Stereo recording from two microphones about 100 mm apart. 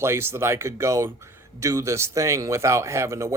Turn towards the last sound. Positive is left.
turn(degrees=-30)  # may be behind; listen again after turning